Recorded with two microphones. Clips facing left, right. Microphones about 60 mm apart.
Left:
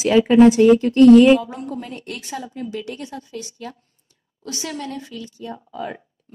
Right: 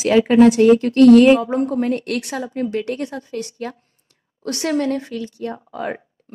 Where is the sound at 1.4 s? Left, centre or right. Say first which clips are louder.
Right 10 dB; right.